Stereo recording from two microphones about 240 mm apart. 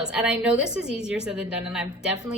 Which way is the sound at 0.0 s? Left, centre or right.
Centre.